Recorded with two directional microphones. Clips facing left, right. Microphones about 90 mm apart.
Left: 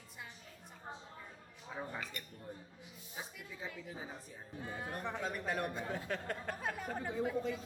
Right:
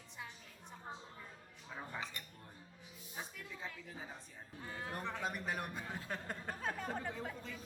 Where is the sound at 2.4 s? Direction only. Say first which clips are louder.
Left 7 dB; 10° left (ahead or behind).